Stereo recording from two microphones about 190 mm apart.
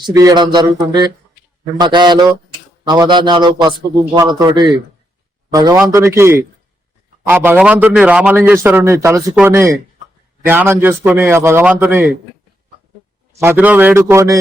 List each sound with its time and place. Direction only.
0.0 s a man's voice: 20° right (ahead or behind)
13.4 s a man's voice: 10° right (ahead or behind)